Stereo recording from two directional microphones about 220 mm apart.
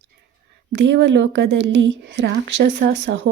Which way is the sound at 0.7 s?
55° right (ahead or behind).